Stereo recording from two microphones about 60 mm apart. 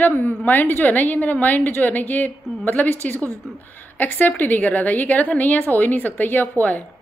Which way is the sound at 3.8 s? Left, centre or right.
Left.